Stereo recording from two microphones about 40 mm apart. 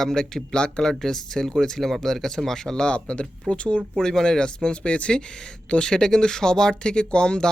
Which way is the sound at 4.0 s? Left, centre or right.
Centre.